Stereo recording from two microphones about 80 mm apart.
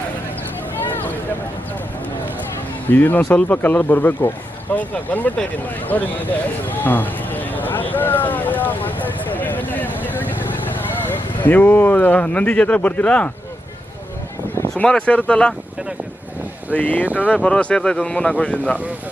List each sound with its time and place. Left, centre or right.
2.9 s speech: left
5.9 s a sound: left
11.0 s speech: left
14.8 s speech: centre
16.7 s speech: left